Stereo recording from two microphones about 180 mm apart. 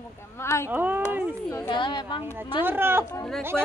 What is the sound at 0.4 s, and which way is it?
Speech, 15° left (ahead or behind).